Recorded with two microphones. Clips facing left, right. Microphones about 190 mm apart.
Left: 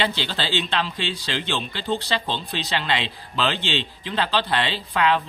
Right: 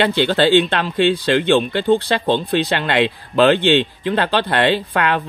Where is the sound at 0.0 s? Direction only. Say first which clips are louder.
Right 11 dB; 55° right (ahead or behind).